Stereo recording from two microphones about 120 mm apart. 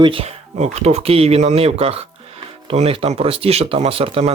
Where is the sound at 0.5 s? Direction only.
65° right (ahead or behind).